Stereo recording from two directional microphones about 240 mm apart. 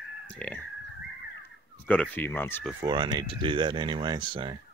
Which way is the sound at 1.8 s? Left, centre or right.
Centre.